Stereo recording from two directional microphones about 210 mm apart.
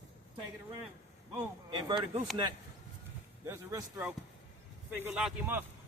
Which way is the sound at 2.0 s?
5° right (ahead or behind).